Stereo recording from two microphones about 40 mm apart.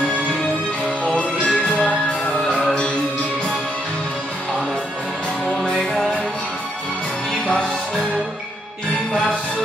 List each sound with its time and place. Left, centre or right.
1.0 s music: left
5.6 s music: centre